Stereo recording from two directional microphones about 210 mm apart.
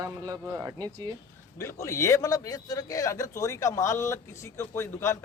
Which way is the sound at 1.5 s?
15° left (ahead or behind).